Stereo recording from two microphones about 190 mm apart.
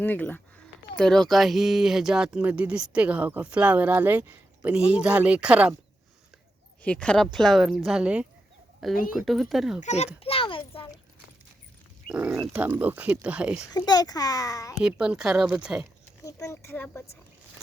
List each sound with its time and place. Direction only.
0.0 s a woman's voice: 10° left (ahead or behind)
6.8 s speech: 5° left (ahead or behind)
9.8 s a child's voice: 35° left (ahead or behind)
10.2 s a sound: 30° left (ahead or behind)
12.0 s speech: 5° right (ahead or behind)
13.7 s a child's voice: 20° left (ahead or behind)
14.8 s speech: 5° right (ahead or behind)
16.2 s a woman's voice: 15° left (ahead or behind)